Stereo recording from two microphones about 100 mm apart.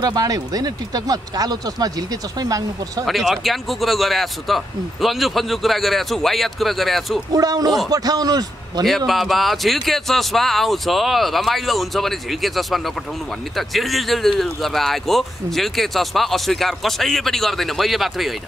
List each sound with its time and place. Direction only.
0.0 s speech: 40° right (ahead or behind)
3.1 s speech: centre (ahead or behind)
7.3 s speech: 40° right (ahead or behind)
8.8 s speech: centre (ahead or behind)